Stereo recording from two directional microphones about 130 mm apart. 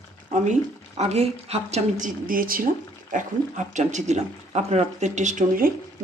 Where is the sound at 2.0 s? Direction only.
90° right.